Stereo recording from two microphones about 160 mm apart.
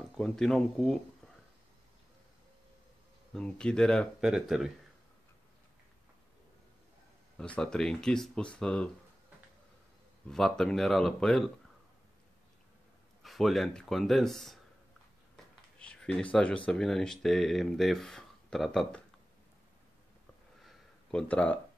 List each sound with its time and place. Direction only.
0.2 s speech: 5° left (ahead or behind)
3.3 s speech: 5° left (ahead or behind)
7.3 s speech: 5° left (ahead or behind)
10.3 s speech: 5° left (ahead or behind)
13.2 s speech: centre (ahead or behind)
15.8 s speech: 5° left (ahead or behind)
20.6 s a sound: 5° left (ahead or behind)